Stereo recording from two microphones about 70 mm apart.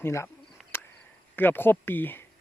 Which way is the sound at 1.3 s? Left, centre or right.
Left.